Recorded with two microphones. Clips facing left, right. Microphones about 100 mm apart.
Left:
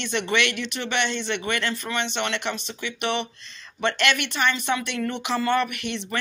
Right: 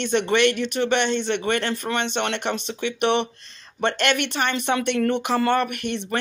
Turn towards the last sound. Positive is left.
turn(degrees=-50)  # may be behind; listen again after turning